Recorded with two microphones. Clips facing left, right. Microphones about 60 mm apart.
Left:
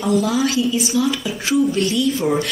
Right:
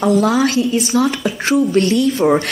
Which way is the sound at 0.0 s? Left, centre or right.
Right.